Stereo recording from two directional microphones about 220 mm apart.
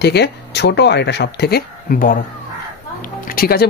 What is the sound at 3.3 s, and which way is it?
Speech, 45° left (ahead or behind).